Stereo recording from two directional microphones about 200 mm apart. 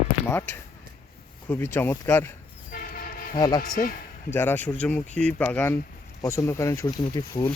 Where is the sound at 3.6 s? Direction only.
40° left (ahead or behind).